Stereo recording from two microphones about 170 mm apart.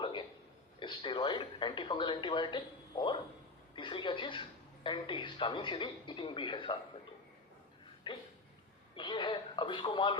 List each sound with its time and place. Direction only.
0.0 s a sound: 30° left (ahead or behind)
0.8 s television: 30° left (ahead or behind)
3.8 s a man's voice: 30° left (ahead or behind)
8.1 s a man's voice: 30° left (ahead or behind)